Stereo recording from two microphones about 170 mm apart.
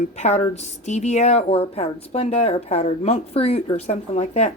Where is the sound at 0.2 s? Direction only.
40° left (ahead or behind).